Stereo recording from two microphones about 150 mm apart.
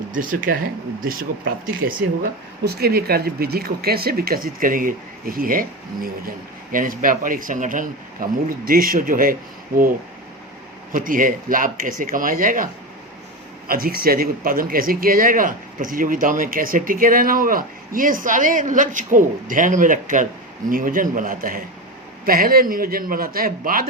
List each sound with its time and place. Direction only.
0.2 s speech: 65° right (ahead or behind)
1.0 s speech: 75° right (ahead or behind)
2.6 s speech: 90° right; by 9.3 s 70° right (ahead or behind)
10.9 s speech: 65° right (ahead or behind)
13.7 s speech: 80° right